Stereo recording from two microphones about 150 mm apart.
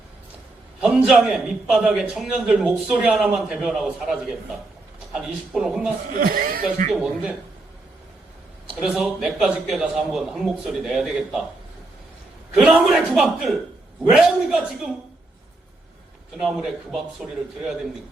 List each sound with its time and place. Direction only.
0.8 s a man's voice: 5° right (ahead or behind)
6.1 s speech: 70° right (ahead or behind)
6.9 s a man's voice: 5° right (ahead or behind)
8.8 s a man's voice: 5° right (ahead or behind)
12.5 s a man's voice: 5° right (ahead or behind)
16.4 s a man's voice: centre (ahead or behind)